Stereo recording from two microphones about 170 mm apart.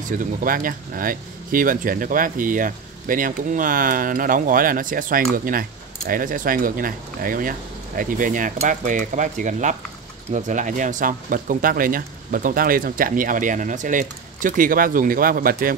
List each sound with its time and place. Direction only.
0.2 s speech: 55° right (ahead or behind)